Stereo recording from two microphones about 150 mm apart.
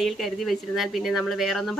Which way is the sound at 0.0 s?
Centre (ahead or behind).